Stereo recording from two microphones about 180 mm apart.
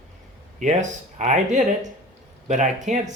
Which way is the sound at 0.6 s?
40° right (ahead or behind).